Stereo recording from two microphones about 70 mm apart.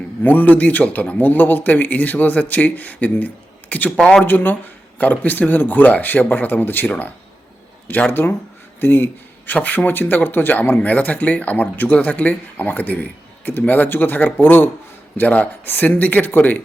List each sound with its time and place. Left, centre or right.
0.2 s speech: left
4.2 s speech: left